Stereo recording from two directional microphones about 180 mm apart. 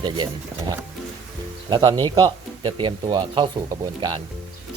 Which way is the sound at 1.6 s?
25° right (ahead or behind).